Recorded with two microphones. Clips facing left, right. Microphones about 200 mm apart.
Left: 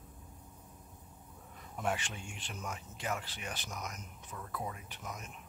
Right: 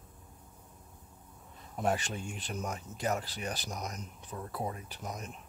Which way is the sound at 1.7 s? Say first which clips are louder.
Right 5 dB; 40° right (ahead or behind).